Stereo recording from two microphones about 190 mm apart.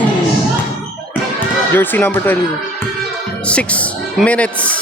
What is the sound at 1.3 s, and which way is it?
Speech, 10° left (ahead or behind).